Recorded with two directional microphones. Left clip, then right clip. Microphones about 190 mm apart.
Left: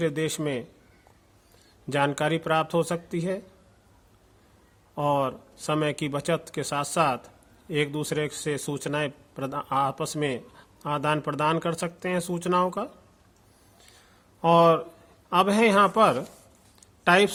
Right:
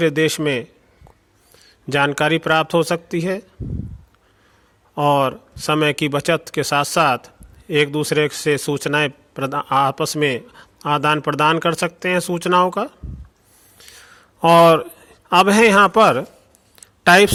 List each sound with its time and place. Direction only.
0.0 s speech: 30° right (ahead or behind)
1.9 s speech: 30° right (ahead or behind)
4.9 s a man's voice: 30° right (ahead or behind)
14.4 s a man's voice: 35° right (ahead or behind)
16.8 s a sound: 35° right (ahead or behind)